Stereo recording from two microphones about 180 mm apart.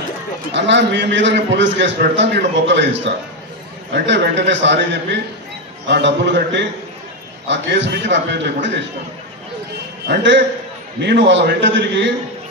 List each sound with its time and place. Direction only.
0.5 s a man's voice: 80° right
10.0 s a man's voice: 75° right (ahead or behind)